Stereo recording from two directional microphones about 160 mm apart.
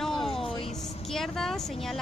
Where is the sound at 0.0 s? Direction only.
Centre (ahead or behind).